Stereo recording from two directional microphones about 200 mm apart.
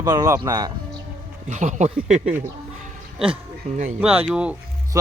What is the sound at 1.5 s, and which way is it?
Speech, 35° right (ahead or behind).